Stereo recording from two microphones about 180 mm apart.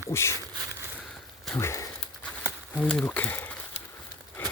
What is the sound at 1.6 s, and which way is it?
Speech, 15° left (ahead or behind).